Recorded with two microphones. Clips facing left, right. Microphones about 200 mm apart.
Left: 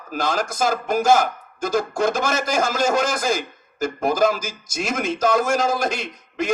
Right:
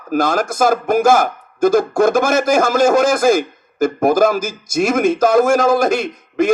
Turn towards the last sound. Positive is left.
turn(degrees=-50)  # may be behind; listen again after turning